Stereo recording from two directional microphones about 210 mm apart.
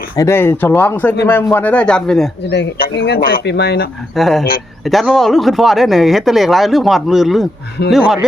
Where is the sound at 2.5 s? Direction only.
55° left (ahead or behind).